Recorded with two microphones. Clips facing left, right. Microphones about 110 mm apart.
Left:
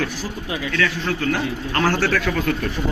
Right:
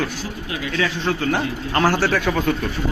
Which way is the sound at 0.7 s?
25° right (ahead or behind).